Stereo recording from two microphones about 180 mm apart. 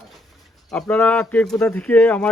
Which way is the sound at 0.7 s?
5° left (ahead or behind).